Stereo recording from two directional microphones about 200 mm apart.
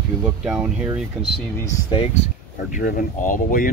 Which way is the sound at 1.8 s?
30° left (ahead or behind).